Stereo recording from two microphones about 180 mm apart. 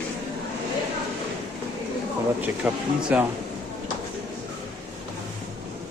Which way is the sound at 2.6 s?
5° right (ahead or behind).